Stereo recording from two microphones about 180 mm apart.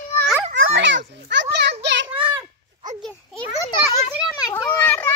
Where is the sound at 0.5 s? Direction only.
90° right; by 2.0 s 70° right (ahead or behind).